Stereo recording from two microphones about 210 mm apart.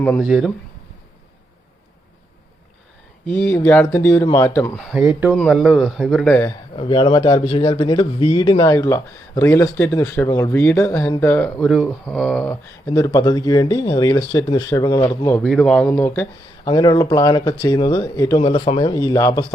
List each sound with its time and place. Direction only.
0.0 s speech: 5° left (ahead or behind)
3.2 s speech: 10° left (ahead or behind)
6.7 s speech: 20° left (ahead or behind); by 12.5 s 5° left (ahead or behind)
12.9 s speech: 20° left (ahead or behind)